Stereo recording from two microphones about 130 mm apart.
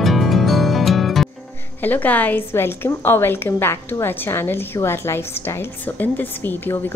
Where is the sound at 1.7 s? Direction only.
15° left (ahead or behind).